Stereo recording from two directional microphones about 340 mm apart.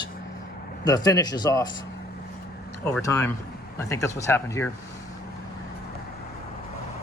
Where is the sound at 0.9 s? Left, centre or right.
Centre.